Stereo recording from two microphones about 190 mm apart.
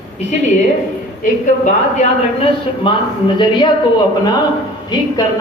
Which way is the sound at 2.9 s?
25° left (ahead or behind).